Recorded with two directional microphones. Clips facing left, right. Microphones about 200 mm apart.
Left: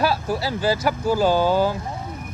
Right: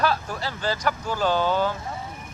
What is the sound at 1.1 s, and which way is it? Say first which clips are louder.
Speech: left 5 dB; 40° left (ahead or behind).